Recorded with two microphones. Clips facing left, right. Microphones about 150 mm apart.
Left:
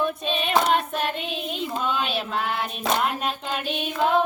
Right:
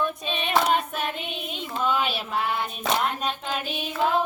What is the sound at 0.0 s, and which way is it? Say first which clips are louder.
Child singing: left 3 dB; 5° left (ahead or behind).